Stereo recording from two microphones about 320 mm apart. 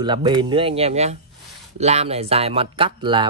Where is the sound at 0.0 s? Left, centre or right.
Centre.